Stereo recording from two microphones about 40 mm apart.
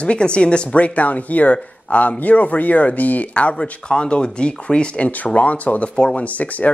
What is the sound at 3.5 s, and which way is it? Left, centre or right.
Speech, left.